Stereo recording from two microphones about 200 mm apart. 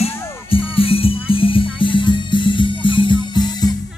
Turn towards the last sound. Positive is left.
turn(degrees=20)  # may be behind; listen again after turning